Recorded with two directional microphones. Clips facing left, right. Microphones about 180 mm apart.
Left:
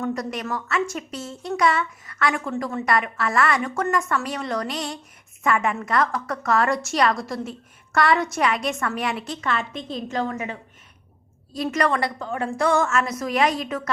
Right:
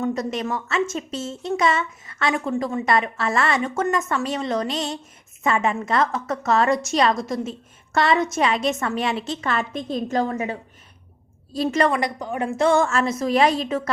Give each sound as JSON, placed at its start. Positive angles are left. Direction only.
{"t": 0.0, "sound": "a woman's voice", "side_deg": -25}
{"t": 9.5, "sound": "a woman's voice", "side_deg": -45}
{"t": 11.9, "sound": "a woman's voice", "side_deg": -15}